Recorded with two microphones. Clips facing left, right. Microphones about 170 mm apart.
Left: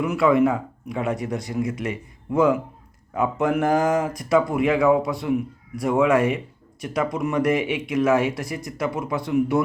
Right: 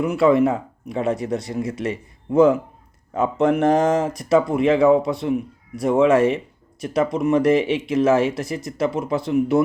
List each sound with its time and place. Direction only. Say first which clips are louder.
0.0 s speech: right 2 dB; 25° right (ahead or behind)